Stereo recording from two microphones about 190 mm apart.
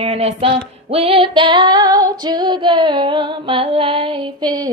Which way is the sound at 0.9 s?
30° right (ahead or behind).